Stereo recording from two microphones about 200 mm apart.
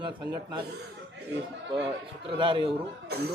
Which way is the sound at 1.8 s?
25° right (ahead or behind).